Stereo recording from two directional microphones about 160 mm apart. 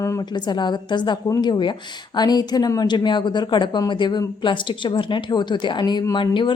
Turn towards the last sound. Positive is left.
turn(degrees=30)  # may be behind; listen again after turning